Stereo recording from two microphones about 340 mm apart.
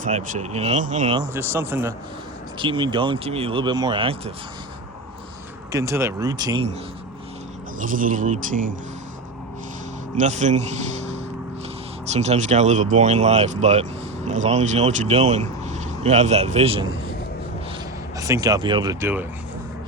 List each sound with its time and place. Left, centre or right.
0.0 s speech: centre
1.3 s speech: centre
5.7 s speech: centre
7.8 s speech: right
10.2 s speech: right
12.0 s speech: centre
18.2 s speech: centre